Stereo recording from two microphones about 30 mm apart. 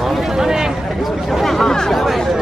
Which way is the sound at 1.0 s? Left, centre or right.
Centre.